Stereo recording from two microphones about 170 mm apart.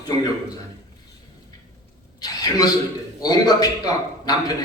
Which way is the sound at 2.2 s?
25° left (ahead or behind).